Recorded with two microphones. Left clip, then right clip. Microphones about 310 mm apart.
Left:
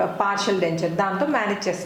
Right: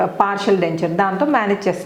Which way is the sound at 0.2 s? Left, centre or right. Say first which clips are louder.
Right 5 dB; right.